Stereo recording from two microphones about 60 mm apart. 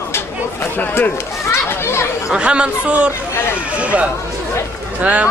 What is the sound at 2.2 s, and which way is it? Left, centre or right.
Speech, centre.